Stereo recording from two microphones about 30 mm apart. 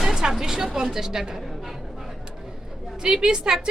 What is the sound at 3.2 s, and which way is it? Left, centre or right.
Speech, right.